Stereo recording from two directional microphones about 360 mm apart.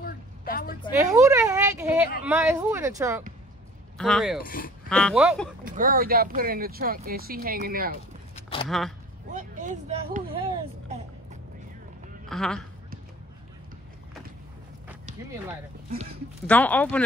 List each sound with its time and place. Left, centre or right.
0.0 s a sound: left
0.9 s a sound: centre
2.2 s speech: centre
4.4 s speech: left
4.8 s speech: centre
5.7 s speech: right
8.6 s speech: centre
9.3 s a sound: right
12.3 s speech: centre
16.4 s speech: centre